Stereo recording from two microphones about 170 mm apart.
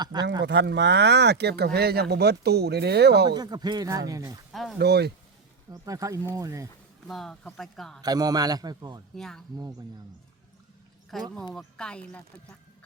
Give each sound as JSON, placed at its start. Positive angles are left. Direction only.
{"t": 0.0, "sound": "a man's voice", "side_deg": -25}
{"t": 0.4, "sound": "speech", "side_deg": -90}
{"t": 3.2, "sound": "a man's voice", "side_deg": -25}
{"t": 4.8, "sound": "speech", "side_deg": -75}
{"t": 5.7, "sound": "a man's voice", "side_deg": -20}
{"t": 7.1, "sound": "speech", "side_deg": 0}
{"t": 8.0, "sound": "a man's voice", "side_deg": -20}
{"t": 9.1, "sound": "speech", "side_deg": 0}
{"t": 11.1, "sound": "speech", "side_deg": 0}